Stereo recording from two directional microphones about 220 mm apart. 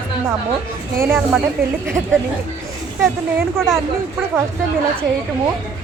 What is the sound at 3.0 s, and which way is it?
Speech, centre (ahead or behind).